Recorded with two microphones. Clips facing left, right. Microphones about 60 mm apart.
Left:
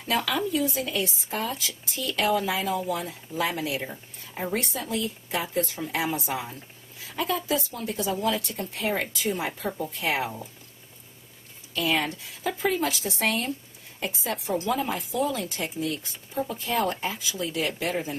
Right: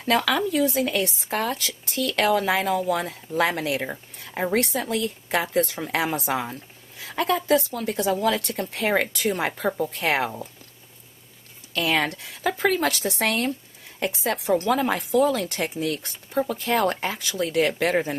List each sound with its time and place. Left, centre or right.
0.0 s a woman's voice: right
9.7 s a woman's voice: right
11.7 s a woman's voice: right